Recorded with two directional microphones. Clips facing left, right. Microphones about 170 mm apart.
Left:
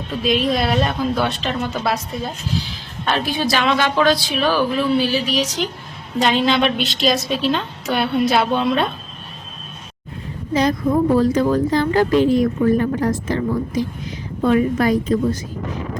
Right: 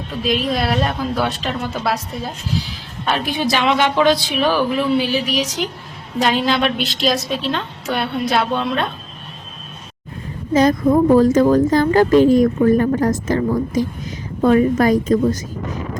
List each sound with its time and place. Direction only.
0.1 s a woman's voice: centre (ahead or behind)
3.3 s a woman's voice: 20° right (ahead or behind)
6.1 s a woman's voice: centre (ahead or behind)
10.5 s a woman's voice: 45° right (ahead or behind)